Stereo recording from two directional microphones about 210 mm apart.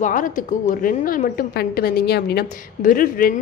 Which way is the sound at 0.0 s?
40° left (ahead or behind).